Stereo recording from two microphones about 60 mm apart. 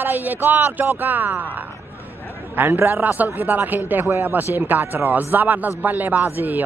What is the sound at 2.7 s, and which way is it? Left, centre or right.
Speech, right.